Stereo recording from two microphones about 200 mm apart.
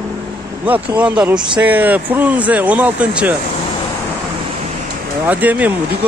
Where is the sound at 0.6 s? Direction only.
5° right (ahead or behind).